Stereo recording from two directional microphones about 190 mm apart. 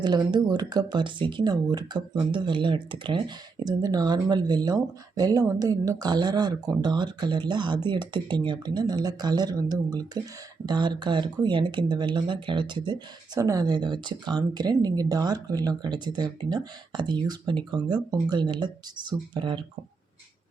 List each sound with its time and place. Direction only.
0.0 s speech: 20° right (ahead or behind)